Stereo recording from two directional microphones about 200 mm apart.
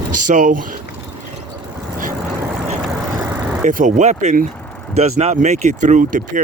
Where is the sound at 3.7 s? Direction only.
40° right (ahead or behind).